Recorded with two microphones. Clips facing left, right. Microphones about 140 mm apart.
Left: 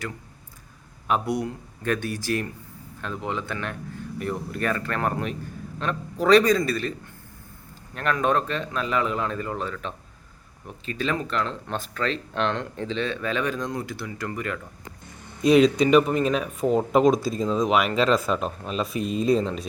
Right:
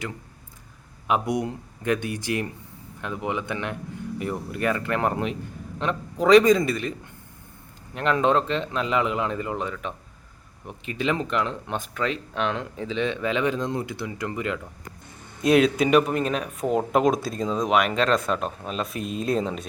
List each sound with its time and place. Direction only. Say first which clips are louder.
1.0 s speech: right 1 dB; 15° right (ahead or behind)
7.9 s speech: right 2 dB; 20° right (ahead or behind); by 13.0 s 5° right (ahead or behind)
13.0 s speech: right 3 dB; 15° right (ahead or behind)
15.4 s speech: left 2 dB; centre (ahead or behind)